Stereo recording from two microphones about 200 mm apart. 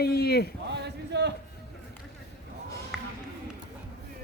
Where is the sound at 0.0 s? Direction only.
50° left (ahead or behind).